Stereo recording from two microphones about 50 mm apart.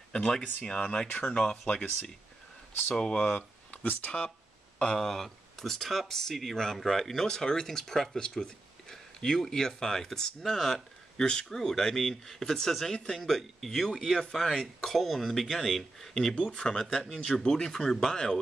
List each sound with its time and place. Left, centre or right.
0.1 s speech: centre
2.9 s speech: centre
3.8 s speech: left
4.7 s speech: centre